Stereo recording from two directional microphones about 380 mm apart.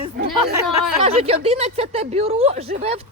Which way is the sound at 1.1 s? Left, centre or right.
Centre.